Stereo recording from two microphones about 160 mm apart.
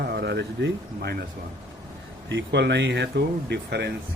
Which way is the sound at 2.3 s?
90° right.